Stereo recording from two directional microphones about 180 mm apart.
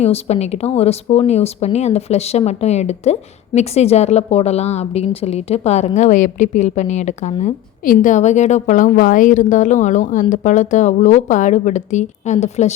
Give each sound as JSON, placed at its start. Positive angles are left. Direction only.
{"t": 0.0, "sound": "speech", "side_deg": 35}